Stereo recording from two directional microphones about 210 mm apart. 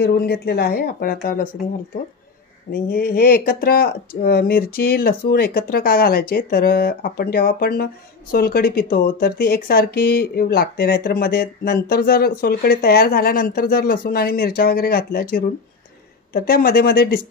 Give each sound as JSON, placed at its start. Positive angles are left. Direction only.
{"t": 0.0, "sound": "speech", "side_deg": 50}
{"t": 2.7, "sound": "speech", "side_deg": 45}